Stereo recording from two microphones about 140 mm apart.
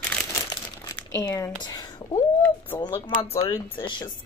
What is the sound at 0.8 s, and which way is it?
Crumpling, 25° left (ahead or behind).